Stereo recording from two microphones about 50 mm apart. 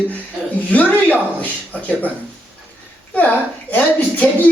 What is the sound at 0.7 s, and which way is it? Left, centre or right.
Speech, left.